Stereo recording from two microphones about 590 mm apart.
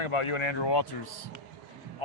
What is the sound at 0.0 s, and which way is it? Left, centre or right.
Speech, left.